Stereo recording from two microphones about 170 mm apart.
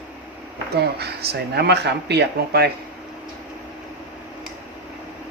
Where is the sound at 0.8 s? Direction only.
70° right (ahead or behind).